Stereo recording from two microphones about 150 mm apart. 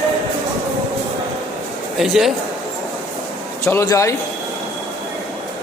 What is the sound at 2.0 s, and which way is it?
Speech, centre (ahead or behind).